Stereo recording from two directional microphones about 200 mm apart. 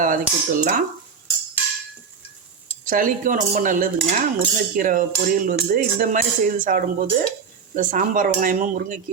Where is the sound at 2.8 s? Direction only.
45° right (ahead or behind).